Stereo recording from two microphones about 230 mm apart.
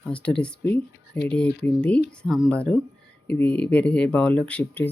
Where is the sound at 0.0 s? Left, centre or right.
Centre.